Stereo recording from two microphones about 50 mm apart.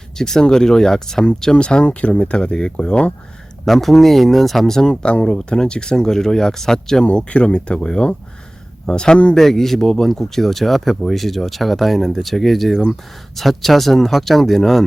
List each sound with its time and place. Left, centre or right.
0.2 s speech: centre
3.7 s speech: centre
7.0 s speech: left
9.4 s speech: centre